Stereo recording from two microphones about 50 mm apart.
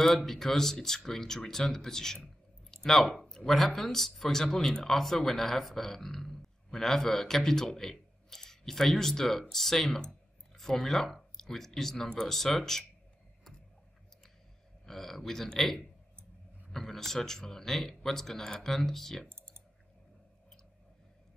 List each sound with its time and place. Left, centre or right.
0.0 s speech: centre
14.9 s speech: centre
19.2 s typing: right